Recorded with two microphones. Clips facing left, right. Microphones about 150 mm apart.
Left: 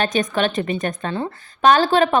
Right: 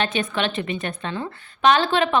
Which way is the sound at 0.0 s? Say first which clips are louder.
Left 4 dB; 40° left (ahead or behind).